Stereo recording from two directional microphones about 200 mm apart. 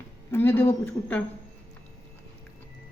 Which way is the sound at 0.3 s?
10° left (ahead or behind).